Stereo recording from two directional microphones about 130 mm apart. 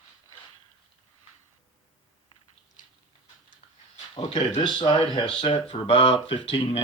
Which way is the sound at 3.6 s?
60° left (ahead or behind).